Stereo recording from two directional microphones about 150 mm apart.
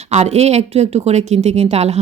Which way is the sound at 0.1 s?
45° right (ahead or behind).